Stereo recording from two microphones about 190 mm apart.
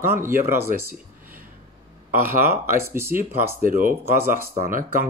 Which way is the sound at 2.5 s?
15° right (ahead or behind).